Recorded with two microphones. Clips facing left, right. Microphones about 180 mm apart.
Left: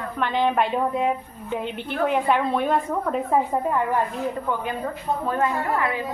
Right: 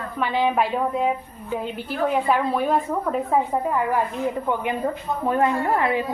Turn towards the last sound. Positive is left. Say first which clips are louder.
# right 3 dB
turn(degrees=-20)  # may be behind; listen again after turning